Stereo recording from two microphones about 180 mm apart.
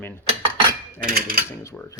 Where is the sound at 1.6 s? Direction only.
15° left (ahead or behind).